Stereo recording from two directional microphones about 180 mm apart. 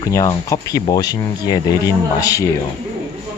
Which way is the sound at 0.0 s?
20° left (ahead or behind).